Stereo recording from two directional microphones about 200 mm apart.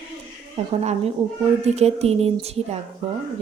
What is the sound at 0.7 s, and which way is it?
Speech, 30° right (ahead or behind).